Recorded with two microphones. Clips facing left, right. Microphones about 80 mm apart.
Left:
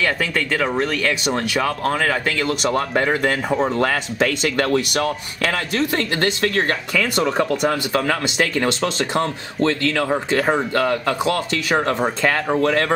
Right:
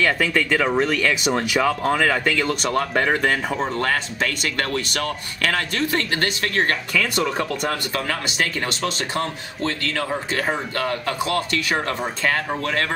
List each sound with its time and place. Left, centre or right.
0.0 s speech: centre
8.6 s speech: left
9.6 s speech: left